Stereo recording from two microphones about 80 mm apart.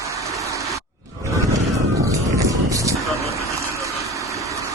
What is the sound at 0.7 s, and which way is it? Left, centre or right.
Roar, right.